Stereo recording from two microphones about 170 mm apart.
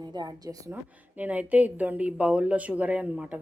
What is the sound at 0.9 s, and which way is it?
A woman's voice, 10° right (ahead or behind).